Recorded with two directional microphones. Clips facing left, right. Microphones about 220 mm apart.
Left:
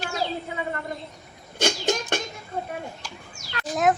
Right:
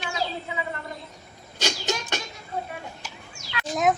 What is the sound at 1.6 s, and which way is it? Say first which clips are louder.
Music: left 4 dB; 50° left (ahead or behind).